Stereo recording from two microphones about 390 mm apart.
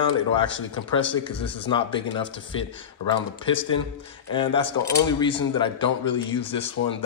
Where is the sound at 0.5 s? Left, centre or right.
Left.